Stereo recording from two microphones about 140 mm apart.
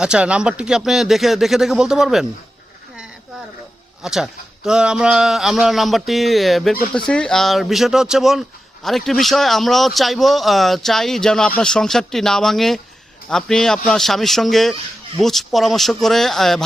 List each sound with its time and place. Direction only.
0.0 s speech: 5° right (ahead or behind)
4.0 s speech: 5° right (ahead or behind)